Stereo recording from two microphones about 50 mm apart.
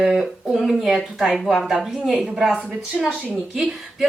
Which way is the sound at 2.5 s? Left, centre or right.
Centre.